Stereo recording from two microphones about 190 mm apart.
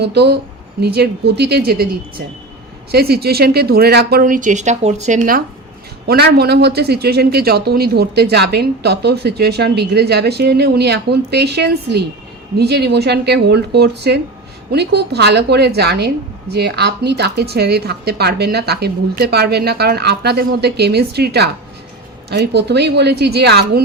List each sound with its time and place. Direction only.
0.0 s a woman's voice: 60° right (ahead or behind); by 5.4 s 45° right (ahead or behind)
6.1 s a woman's voice: 55° right (ahead or behind)